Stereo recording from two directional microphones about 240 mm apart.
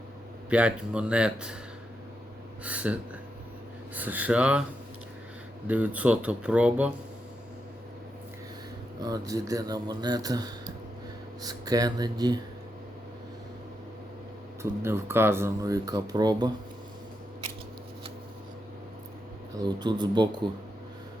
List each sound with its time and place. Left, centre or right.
0.5 s speech: centre
2.6 s speech: centre
5.6 s speech: centre
9.0 s speech: centre
14.6 s speech: centre
19.5 s speech: centre